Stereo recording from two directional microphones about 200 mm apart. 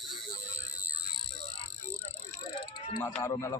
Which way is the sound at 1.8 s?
10° left (ahead or behind).